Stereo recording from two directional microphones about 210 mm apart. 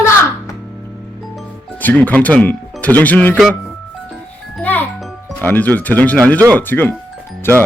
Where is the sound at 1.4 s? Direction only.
10° left (ahead or behind).